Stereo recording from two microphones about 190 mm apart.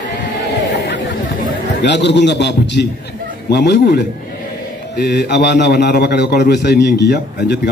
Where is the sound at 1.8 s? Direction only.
65° left (ahead or behind).